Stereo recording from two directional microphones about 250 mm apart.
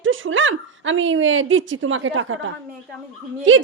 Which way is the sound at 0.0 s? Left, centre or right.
Right.